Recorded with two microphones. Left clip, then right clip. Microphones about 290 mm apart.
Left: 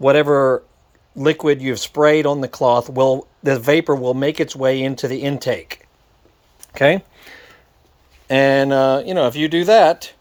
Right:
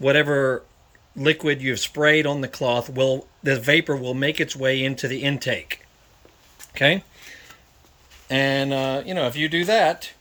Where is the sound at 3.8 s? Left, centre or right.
Left.